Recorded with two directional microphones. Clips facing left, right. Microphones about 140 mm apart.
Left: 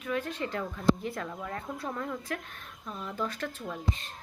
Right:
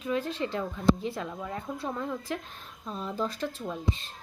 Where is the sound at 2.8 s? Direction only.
25° right (ahead or behind).